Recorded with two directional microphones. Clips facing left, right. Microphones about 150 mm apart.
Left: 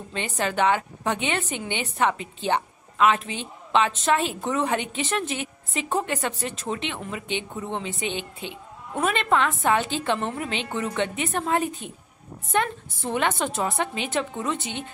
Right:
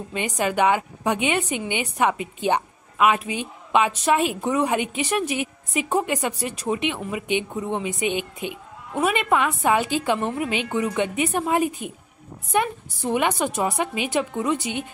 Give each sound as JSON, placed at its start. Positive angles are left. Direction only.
{"t": 0.4, "sound": "a woman's voice", "side_deg": -10}